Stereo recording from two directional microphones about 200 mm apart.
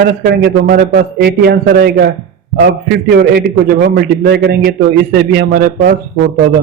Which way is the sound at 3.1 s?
50° right (ahead or behind).